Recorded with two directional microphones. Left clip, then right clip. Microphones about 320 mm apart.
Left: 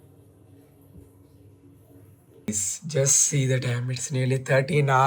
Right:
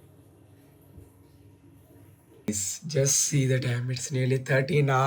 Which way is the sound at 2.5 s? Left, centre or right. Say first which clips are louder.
Left 2 dB; centre.